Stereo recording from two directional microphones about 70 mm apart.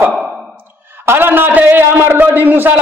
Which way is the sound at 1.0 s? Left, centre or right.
Right.